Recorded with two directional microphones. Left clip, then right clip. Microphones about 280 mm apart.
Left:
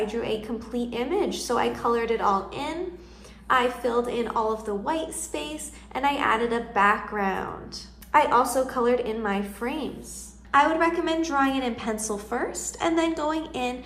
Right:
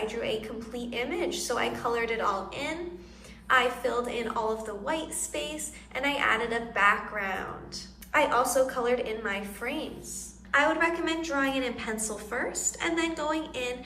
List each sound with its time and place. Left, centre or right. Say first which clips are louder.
0.1 s a woman's voice: left 3 dB; centre